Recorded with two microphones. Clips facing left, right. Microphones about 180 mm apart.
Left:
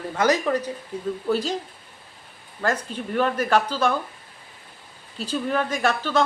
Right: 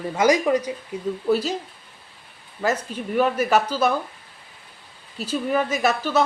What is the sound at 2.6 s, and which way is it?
Speech, 5° right (ahead or behind).